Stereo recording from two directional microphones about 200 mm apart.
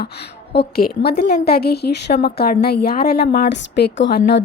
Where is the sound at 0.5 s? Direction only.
50° left (ahead or behind).